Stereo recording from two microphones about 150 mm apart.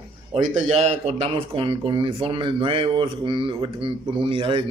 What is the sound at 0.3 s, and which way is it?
Speech, 45° right (ahead or behind).